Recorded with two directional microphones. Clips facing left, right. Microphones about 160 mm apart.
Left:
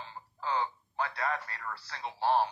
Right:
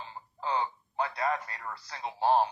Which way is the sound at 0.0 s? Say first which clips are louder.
Right 2 dB; 20° right (ahead or behind).